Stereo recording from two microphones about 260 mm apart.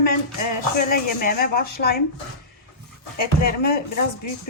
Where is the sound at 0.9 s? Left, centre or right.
Left.